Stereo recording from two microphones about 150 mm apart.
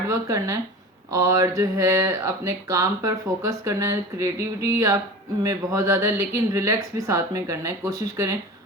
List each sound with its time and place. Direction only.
0.1 s speech: 20° right (ahead or behind)